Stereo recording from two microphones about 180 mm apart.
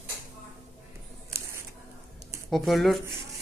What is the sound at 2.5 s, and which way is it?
Speech, centre (ahead or behind).